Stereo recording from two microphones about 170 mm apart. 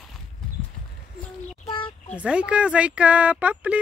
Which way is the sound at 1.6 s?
30° left (ahead or behind).